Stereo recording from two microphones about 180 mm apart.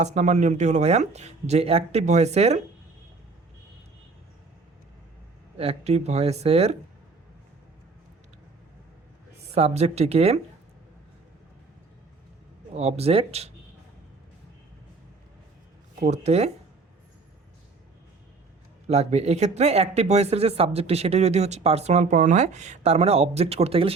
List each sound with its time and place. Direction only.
0.0 s speech: 40° right (ahead or behind)
5.5 s speech: 35° right (ahead or behind)
9.6 s speech: 35° right (ahead or behind)
12.7 s speech: 35° right (ahead or behind)
16.0 s speech: 40° right (ahead or behind)
18.9 s speech: 35° right (ahead or behind)